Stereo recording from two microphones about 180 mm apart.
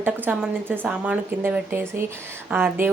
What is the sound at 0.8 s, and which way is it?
Speech, 5° right (ahead or behind).